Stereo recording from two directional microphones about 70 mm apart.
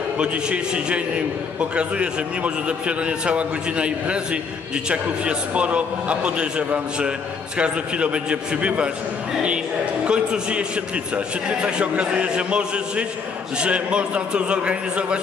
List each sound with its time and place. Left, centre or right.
0.2 s a man's voice: centre
10.0 s a man's voice: centre